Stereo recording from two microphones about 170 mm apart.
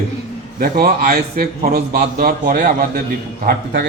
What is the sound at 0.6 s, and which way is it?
A man's voice, 55° right (ahead or behind).